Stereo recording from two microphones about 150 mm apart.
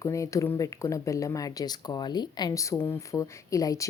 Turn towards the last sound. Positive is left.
turn(degrees=20)  # may be behind; listen again after turning